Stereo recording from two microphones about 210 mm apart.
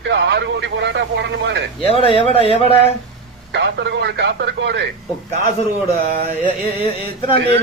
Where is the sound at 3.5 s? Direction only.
55° right (ahead or behind).